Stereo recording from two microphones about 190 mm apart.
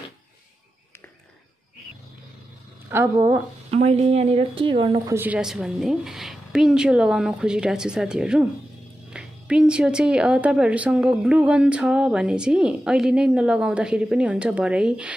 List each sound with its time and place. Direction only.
2.9 s speech: 15° right (ahead or behind)
3.7 s speech: 35° right (ahead or behind)
5.1 s a woman's voice: 10° right (ahead or behind)